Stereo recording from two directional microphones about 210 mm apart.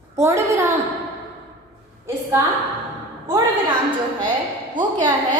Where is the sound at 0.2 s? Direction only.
10° right (ahead or behind).